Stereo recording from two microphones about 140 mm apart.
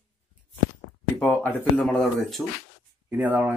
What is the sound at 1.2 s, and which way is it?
Speech, 10° left (ahead or behind).